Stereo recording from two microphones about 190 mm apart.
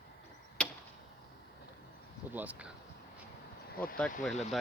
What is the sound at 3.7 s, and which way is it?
Speech, 50° left (ahead or behind).